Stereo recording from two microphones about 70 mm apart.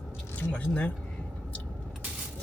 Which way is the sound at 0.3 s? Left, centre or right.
Centre.